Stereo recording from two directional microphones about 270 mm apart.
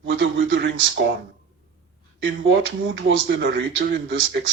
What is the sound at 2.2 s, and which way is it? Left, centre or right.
Speech, right.